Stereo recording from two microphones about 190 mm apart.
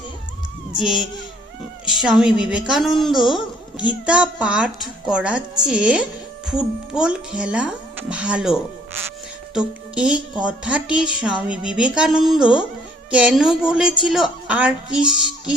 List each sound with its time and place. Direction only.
0.8 s speech: centre (ahead or behind)